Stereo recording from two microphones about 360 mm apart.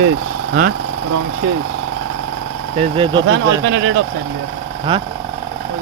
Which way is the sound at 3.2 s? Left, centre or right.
Right.